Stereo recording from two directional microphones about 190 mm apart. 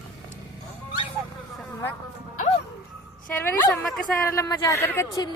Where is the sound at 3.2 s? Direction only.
5° left (ahead or behind).